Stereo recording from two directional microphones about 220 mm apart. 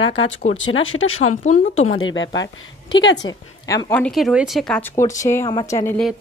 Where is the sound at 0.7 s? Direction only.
65° left (ahead or behind).